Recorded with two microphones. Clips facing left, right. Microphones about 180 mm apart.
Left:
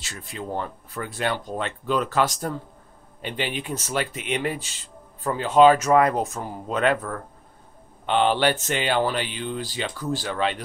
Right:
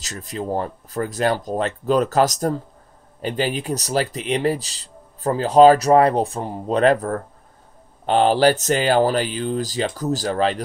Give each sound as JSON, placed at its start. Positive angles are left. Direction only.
{"t": 0.0, "sound": "a man's voice", "side_deg": -40}